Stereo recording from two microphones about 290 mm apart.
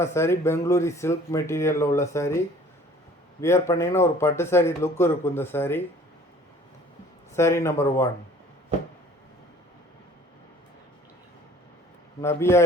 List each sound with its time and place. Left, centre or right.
0.0 s speech: centre
3.4 s speech: centre
7.3 s speech: centre
12.2 s speech: centre